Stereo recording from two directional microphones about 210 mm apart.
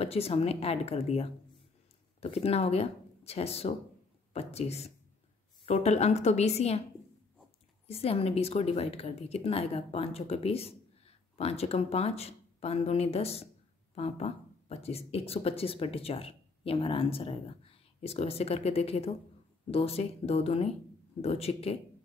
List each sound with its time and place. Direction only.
0.0 s a woman's voice: 30° left (ahead or behind)
7.9 s a woman's voice: 30° left (ahead or behind)